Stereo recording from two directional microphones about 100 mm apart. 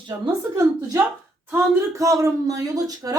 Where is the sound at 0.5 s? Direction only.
30° right (ahead or behind).